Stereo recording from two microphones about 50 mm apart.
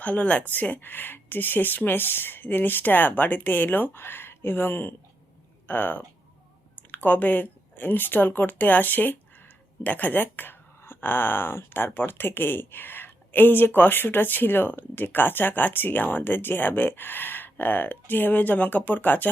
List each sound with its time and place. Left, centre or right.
0.0 s speech: left
0.5 s speech: left